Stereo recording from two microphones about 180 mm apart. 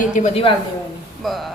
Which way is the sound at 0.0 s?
45° left (ahead or behind).